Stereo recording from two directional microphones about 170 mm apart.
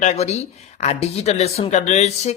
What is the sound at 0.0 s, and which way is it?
A woman's voice, 40° left (ahead or behind).